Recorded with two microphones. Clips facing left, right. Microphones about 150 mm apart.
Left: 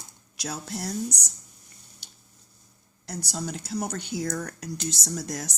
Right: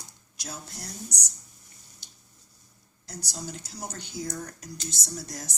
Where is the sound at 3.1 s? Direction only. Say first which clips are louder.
Left 6 dB; 65° left (ahead or behind).